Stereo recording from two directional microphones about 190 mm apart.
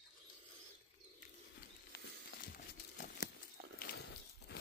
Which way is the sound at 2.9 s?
45° left (ahead or behind).